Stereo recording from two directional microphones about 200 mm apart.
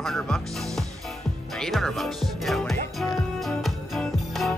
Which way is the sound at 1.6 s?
Centre (ahead or behind).